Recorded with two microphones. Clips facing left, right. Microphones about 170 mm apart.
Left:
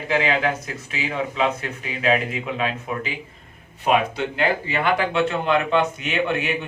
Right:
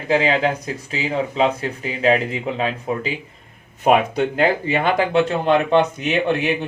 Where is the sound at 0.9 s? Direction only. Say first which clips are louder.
Right 3 dB; 30° right (ahead or behind).